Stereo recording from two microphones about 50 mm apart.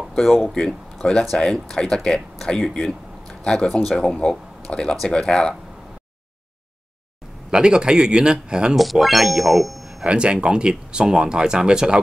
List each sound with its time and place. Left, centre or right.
0.1 s speech: centre
2.7 s a sound: centre
3.8 s speech: centre
7.5 s speech: centre
8.7 s speech: centre
10.0 s speech: centre